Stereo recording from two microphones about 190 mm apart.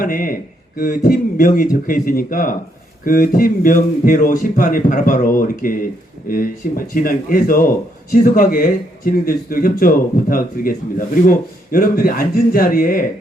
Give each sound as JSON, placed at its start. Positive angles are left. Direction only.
{"t": 0.0, "sound": "speech", "side_deg": 45}